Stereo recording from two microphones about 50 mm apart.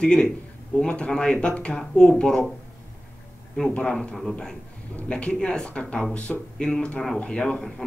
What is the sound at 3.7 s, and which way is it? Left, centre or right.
Speech, centre.